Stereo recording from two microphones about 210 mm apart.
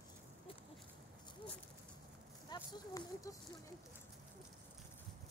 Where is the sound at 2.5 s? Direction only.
20° left (ahead or behind).